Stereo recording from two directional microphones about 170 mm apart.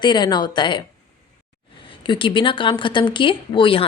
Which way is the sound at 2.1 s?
30° left (ahead or behind).